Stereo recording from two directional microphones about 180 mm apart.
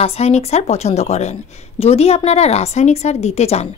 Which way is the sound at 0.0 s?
35° left (ahead or behind).